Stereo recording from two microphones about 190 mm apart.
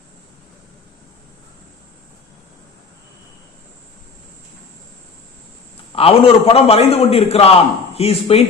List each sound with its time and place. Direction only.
5.9 s a man's voice: 30° left (ahead or behind)